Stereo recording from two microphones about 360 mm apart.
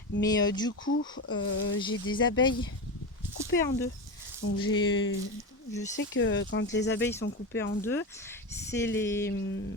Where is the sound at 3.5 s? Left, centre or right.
Left.